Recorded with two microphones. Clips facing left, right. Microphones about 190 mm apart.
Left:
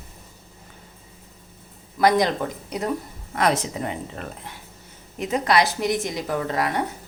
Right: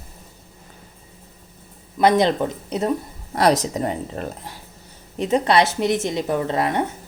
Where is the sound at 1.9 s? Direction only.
25° right (ahead or behind).